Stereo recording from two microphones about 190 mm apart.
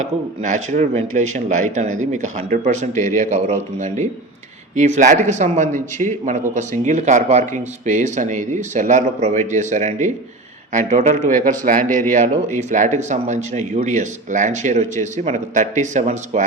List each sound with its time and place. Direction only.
0.4 s speech: 40° right (ahead or behind)